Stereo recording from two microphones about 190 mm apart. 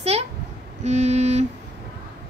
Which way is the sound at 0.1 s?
35° right (ahead or behind).